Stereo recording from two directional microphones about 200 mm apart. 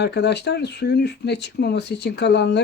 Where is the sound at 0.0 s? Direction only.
55° left (ahead or behind).